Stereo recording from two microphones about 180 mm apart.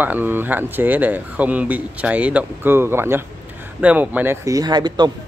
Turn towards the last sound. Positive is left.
turn(degrees=-25)  # may be behind; listen again after turning